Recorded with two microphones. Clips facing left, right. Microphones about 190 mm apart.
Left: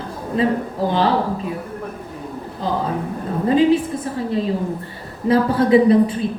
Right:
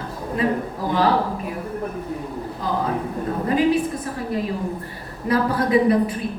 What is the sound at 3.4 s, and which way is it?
A woman's voice, 25° left (ahead or behind).